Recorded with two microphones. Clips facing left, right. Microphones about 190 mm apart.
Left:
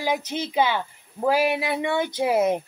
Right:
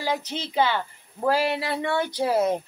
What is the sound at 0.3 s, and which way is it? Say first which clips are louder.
Speech: even; 15° left (ahead or behind).